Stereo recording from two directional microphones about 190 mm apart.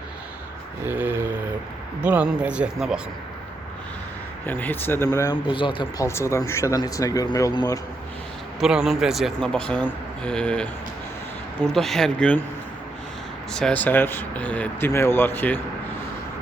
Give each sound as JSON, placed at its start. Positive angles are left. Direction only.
{"t": 0.9, "sound": "mantra", "side_deg": -10}
{"t": 2.0, "sound": "speech", "side_deg": -5}
{"t": 4.4, "sound": "speech", "side_deg": 10}
{"t": 6.1, "sound": "speech", "side_deg": 15}
{"t": 8.6, "sound": "speech", "side_deg": -5}
{"t": 13.5, "sound": "speech", "side_deg": 5}